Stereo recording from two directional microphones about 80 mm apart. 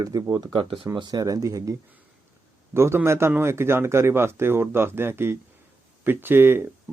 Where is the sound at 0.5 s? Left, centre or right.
Right.